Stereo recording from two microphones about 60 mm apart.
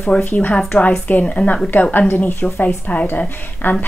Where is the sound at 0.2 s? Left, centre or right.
Left.